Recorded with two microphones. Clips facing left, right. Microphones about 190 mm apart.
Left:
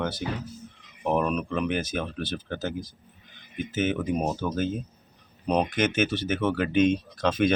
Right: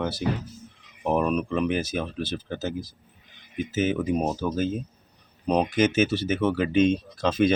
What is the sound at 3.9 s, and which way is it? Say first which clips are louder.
Speech: right 2 dB; 5° right (ahead or behind).